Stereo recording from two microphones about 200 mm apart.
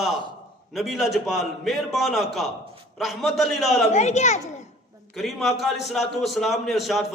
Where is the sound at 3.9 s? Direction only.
35° left (ahead or behind).